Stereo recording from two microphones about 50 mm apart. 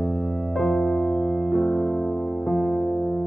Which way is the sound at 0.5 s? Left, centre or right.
Centre.